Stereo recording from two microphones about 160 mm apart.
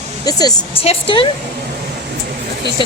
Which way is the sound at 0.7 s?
35° left (ahead or behind).